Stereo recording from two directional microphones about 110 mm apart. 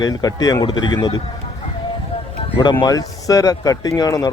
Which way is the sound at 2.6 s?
45° left (ahead or behind).